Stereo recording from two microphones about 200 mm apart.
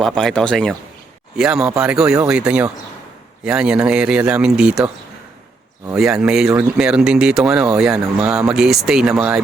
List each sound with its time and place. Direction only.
0.0 s speech: centre (ahead or behind)
5.9 s speech: 5° right (ahead or behind)